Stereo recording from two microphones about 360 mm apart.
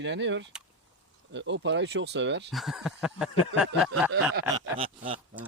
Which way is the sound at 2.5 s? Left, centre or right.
Centre.